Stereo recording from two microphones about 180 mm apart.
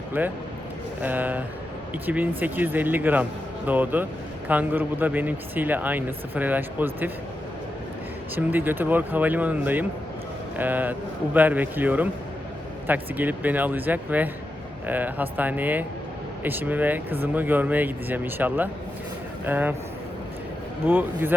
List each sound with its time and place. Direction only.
0.2 s speech: 10° right (ahead or behind)
8.4 s speech: 10° right (ahead or behind)
20.8 s speech: 10° right (ahead or behind)